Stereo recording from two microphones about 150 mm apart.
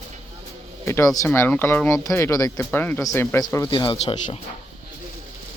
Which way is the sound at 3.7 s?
30° left (ahead or behind).